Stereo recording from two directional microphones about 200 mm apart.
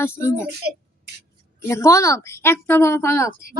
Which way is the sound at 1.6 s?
15° left (ahead or behind).